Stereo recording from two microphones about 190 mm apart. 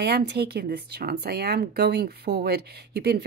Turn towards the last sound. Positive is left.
turn(degrees=-60)  # may be behind; listen again after turning